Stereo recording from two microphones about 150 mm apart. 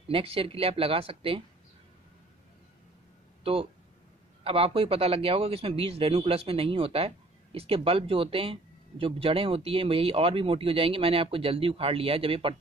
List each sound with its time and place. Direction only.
0.1 s speech: 40° right (ahead or behind)
4.4 s speech: 40° right (ahead or behind)